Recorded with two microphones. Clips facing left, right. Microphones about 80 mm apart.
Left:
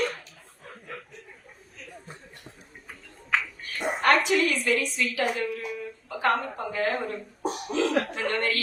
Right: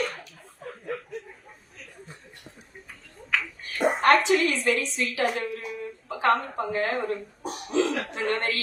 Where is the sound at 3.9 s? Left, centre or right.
Right.